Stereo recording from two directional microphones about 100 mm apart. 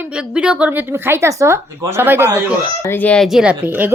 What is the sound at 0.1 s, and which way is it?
Speech, 10° right (ahead or behind).